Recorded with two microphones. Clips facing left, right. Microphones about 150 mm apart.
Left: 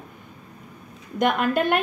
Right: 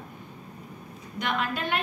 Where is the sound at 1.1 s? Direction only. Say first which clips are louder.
Left 9 dB; 50° left (ahead or behind).